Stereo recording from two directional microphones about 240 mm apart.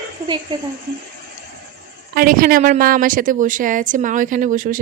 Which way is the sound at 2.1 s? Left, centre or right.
Right.